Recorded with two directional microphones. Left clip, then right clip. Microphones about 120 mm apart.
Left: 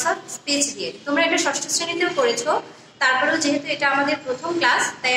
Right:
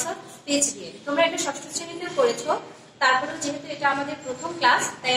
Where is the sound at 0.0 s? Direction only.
20° left (ahead or behind).